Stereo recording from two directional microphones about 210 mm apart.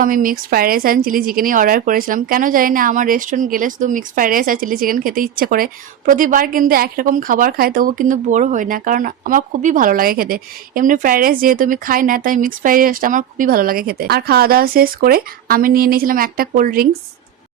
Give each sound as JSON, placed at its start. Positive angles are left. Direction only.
{"t": 0.0, "sound": "a woman's voice", "side_deg": -40}